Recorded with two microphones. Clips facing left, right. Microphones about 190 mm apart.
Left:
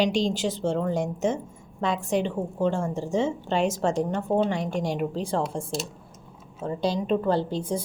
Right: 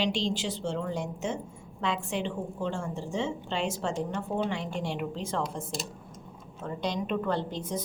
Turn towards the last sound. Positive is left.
turn(degrees=30)  # may be behind; listen again after turning